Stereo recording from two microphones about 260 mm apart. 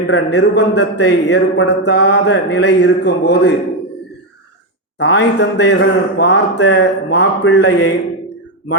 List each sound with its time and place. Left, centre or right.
0.1 s speech: left
4.9 s speech: left